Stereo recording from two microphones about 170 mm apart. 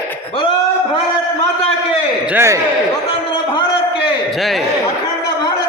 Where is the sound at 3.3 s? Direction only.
30° left (ahead or behind).